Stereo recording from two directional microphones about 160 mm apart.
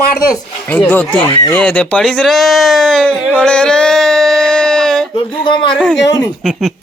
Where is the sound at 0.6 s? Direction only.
10° left (ahead or behind).